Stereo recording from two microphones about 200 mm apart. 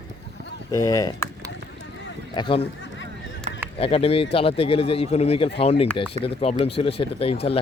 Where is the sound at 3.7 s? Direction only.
30° left (ahead or behind).